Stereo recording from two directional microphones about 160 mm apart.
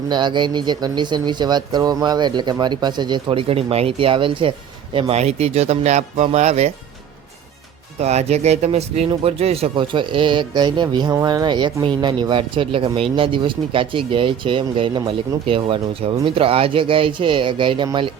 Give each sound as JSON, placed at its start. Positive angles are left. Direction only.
{"t": 0.1, "sound": "speech", "side_deg": -30}
{"t": 7.9, "sound": "speech", "side_deg": -40}